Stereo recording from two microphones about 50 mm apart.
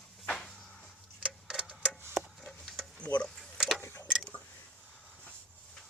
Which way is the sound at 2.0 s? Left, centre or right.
Right.